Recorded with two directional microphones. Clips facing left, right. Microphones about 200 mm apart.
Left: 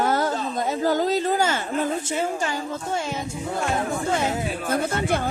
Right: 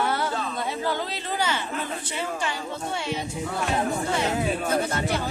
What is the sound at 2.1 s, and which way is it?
Speech, 45° left (ahead or behind).